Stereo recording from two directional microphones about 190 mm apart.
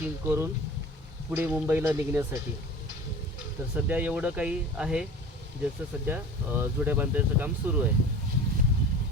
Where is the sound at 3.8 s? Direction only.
10° right (ahead or behind).